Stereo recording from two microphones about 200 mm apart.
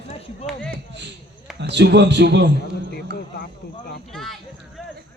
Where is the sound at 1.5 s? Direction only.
60° right (ahead or behind).